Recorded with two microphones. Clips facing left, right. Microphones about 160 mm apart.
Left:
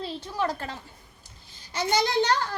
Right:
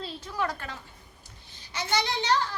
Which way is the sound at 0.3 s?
30° left (ahead or behind).